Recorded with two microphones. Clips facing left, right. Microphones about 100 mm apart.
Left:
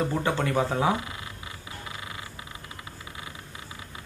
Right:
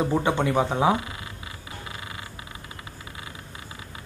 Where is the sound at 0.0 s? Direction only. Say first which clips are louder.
Right 3 dB; 20° right (ahead or behind).